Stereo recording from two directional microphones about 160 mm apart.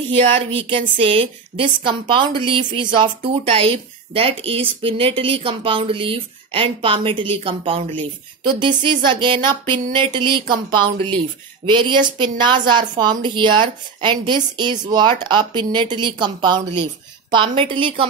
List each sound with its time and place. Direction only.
0.1 s a woman's voice: 35° right (ahead or behind)